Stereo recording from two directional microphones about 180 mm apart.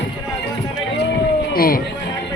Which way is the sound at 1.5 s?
55° left (ahead or behind).